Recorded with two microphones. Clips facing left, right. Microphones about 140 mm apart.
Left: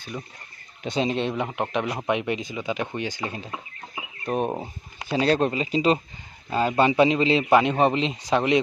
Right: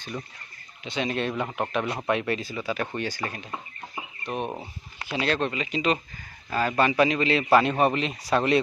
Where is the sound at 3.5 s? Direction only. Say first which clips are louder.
Even; 10° left (ahead or behind).